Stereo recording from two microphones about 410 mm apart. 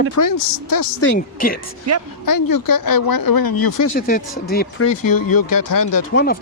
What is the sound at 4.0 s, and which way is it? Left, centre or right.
Speech, left.